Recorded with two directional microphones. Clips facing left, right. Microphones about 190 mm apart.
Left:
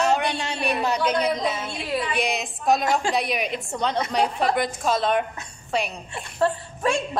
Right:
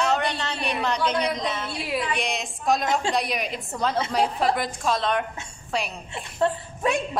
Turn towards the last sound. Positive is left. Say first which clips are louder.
# left 1 dB
turn(degrees=-20)  # may be behind; listen again after turning